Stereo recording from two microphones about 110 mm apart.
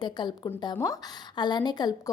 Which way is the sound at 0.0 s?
40° left (ahead or behind).